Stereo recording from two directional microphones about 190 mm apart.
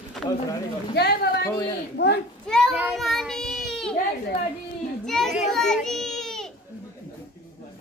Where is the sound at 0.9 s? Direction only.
55° left (ahead or behind).